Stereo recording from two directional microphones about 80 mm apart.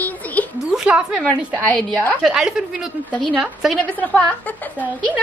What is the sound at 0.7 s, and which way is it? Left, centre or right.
Speech, centre.